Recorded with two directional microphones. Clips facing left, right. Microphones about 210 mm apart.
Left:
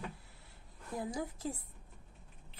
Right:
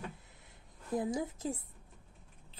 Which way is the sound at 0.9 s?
20° right (ahead or behind).